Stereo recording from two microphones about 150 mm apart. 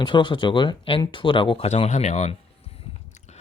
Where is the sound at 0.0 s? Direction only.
30° left (ahead or behind).